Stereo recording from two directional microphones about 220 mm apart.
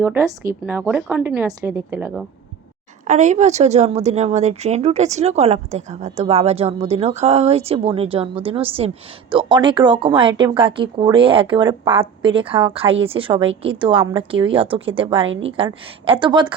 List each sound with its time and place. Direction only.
0.0 s a woman's voice: 10° right (ahead or behind)
3.1 s speech: 35° right (ahead or behind)